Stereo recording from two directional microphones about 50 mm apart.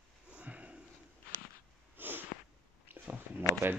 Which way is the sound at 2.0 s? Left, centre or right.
Right.